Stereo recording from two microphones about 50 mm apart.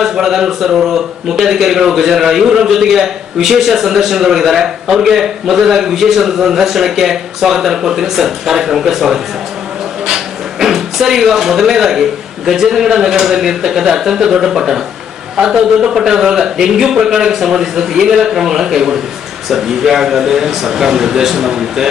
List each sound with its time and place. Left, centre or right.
0.0 s a man's voice: centre
10.6 s a man's voice: centre